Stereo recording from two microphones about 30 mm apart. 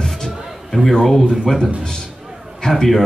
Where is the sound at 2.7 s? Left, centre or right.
Centre.